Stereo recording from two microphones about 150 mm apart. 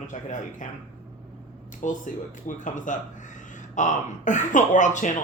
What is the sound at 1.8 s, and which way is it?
Speech, 55° left (ahead or behind).